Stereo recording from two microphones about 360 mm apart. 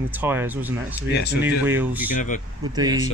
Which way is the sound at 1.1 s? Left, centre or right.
Left.